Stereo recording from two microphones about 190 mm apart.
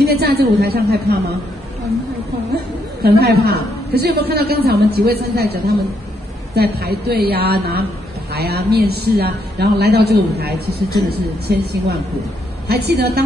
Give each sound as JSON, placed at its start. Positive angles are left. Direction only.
{"t": 0.0, "sound": "a woman's voice", "side_deg": -60}
{"t": 2.5, "sound": "a woman's voice", "side_deg": -60}